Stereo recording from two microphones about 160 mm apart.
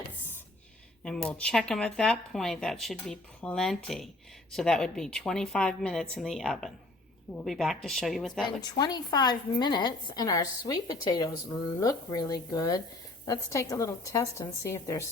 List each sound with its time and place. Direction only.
1.0 s speech: 5° left (ahead or behind)
8.4 s a woman's voice: 25° left (ahead or behind)